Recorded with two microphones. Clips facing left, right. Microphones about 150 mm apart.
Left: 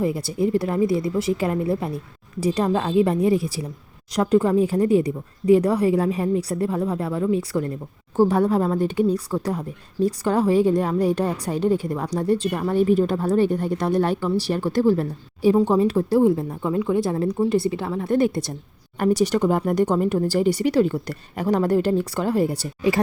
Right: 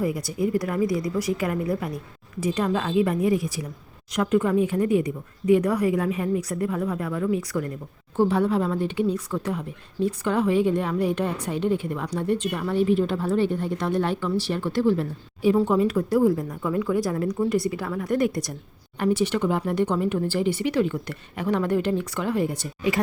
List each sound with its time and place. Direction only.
0.0 s a woman's voice: 30° left (ahead or behind)
8.1 s a woman's voice: 40° left (ahead or behind)
18.9 s a woman's voice: 40° left (ahead or behind)